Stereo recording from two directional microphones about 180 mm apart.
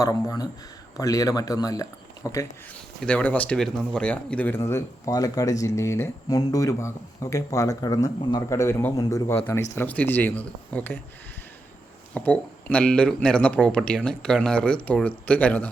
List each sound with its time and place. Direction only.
0.0 s speech: 20° left (ahead or behind)
3.0 s a man's voice: 5° left (ahead or behind)
12.1 s a man's voice: 10° left (ahead or behind)